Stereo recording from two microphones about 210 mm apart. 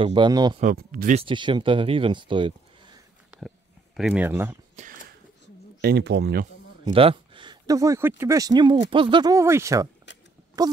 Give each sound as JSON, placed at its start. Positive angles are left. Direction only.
{"t": 0.0, "sound": "speech", "side_deg": -20}
{"t": 0.6, "sound": "speech", "side_deg": -40}
{"t": 1.1, "sound": "speech", "side_deg": -25}
{"t": 3.3, "sound": "a sound", "side_deg": 0}
{"t": 4.8, "sound": "a sound", "side_deg": -30}
{"t": 5.8, "sound": "speech", "side_deg": -50}
{"t": 6.8, "sound": "a sound", "side_deg": -25}
{"t": 8.2, "sound": "speech", "side_deg": -15}
{"t": 10.6, "sound": "wail", "side_deg": -20}